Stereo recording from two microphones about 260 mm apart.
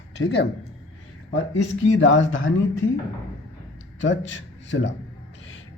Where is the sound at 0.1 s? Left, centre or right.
Left.